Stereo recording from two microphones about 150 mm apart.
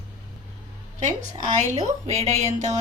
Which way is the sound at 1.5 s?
50° right (ahead or behind).